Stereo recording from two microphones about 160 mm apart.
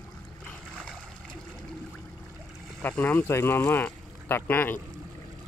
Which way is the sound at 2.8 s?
10° left (ahead or behind).